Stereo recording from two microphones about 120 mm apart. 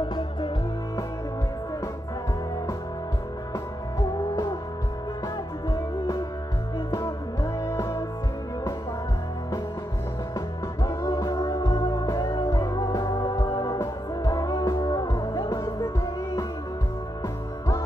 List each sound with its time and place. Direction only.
0.0 s music: 40° left (ahead or behind)
5.7 s music: 25° left (ahead or behind)
7.6 s music: 25° left (ahead or behind)
10.8 s music: 30° left (ahead or behind)